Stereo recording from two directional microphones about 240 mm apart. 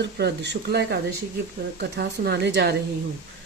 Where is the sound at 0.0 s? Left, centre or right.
Right.